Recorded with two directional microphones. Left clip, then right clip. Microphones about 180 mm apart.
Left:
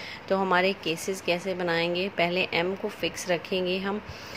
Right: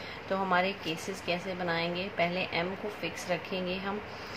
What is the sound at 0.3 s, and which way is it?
A woman's voice, 45° left (ahead or behind).